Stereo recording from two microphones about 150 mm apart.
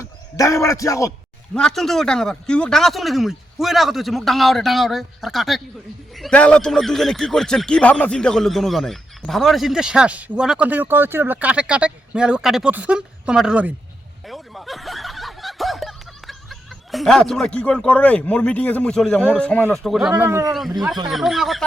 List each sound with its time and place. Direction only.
0.0 s a man's voice: 20° left (ahead or behind)
1.5 s a man's voice: 5° left (ahead or behind)
14.3 s snicker: centre (ahead or behind)
19.3 s a man's voice: 5° left (ahead or behind); by 20.5 s 15° right (ahead or behind)
20.5 s a man's voice: centre (ahead or behind)